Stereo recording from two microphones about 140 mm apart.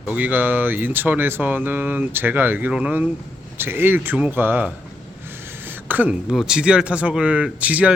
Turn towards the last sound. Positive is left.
turn(degrees=-10)  # may be behind; listen again after turning